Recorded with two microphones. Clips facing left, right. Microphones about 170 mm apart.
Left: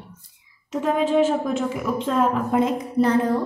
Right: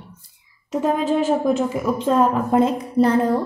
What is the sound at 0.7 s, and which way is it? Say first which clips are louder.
A woman's voice: right 1 dB; 40° right (ahead or behind).